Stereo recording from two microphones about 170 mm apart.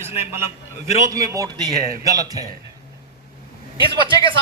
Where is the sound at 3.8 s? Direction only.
30° right (ahead or behind).